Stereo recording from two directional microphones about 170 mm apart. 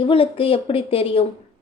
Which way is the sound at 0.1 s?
35° left (ahead or behind).